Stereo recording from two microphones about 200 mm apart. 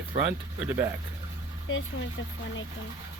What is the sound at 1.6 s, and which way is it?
Speech, 75° left (ahead or behind).